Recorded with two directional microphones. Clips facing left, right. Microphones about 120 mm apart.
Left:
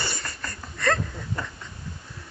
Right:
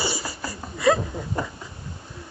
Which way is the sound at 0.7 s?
5° right (ahead or behind).